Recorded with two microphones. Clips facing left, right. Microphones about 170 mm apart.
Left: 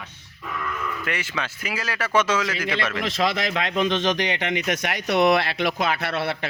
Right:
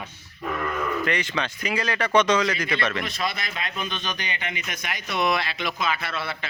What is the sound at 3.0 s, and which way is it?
Speech, 90° left.